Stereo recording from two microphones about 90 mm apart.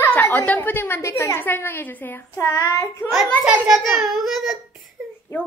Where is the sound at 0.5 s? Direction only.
20° left (ahead or behind).